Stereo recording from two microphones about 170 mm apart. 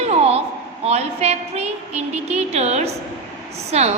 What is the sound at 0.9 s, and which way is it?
A woman's voice, 40° right (ahead or behind).